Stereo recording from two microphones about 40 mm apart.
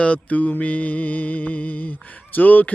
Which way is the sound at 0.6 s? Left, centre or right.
Left.